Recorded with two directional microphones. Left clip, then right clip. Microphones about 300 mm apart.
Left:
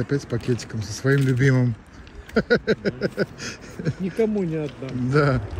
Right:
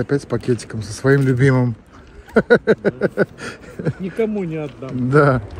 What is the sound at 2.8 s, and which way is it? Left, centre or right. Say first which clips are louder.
Speech: right 7 dB; centre.